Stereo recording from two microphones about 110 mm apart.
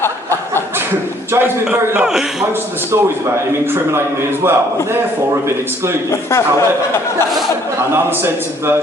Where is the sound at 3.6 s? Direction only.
20° right (ahead or behind).